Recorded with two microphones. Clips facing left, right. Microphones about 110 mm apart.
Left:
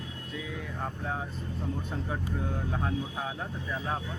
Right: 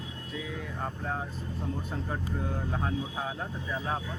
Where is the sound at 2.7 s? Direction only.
Centre (ahead or behind).